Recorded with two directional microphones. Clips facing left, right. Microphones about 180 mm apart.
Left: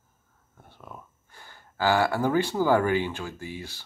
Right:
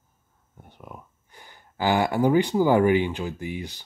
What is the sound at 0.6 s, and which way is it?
Speech, 15° right (ahead or behind).